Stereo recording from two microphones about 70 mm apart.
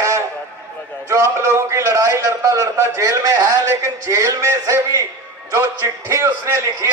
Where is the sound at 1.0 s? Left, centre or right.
Right.